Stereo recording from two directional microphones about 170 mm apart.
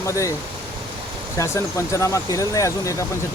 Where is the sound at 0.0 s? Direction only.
20° left (ahead or behind).